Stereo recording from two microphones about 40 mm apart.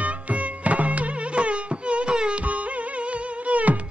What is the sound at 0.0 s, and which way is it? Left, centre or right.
Music, right.